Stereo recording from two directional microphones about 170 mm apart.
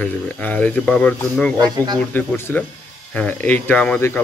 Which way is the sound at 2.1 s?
10° left (ahead or behind).